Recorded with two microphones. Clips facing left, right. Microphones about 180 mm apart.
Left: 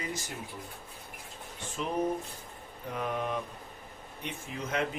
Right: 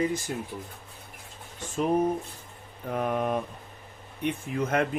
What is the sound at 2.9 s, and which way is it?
A man's voice, 50° right (ahead or behind).